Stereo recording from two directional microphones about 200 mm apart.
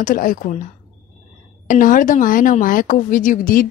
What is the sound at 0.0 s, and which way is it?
Speech, 45° left (ahead or behind).